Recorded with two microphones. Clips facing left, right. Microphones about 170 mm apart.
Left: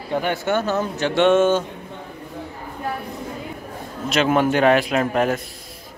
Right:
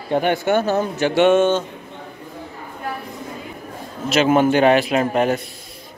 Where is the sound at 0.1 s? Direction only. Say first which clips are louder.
Right 4 dB; 20° right (ahead or behind); by 1.5 s 5° right (ahead or behind).